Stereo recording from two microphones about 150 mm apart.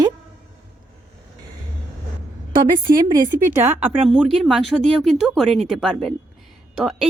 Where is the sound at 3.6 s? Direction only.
15° right (ahead or behind).